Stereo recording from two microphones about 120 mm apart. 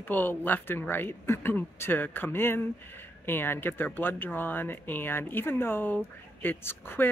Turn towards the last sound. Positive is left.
turn(degrees=20)  # may be behind; listen again after turning